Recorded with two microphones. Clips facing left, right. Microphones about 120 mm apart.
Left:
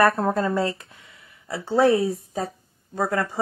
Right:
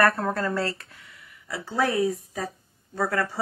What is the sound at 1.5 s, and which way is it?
A woman's voice, 30° left (ahead or behind).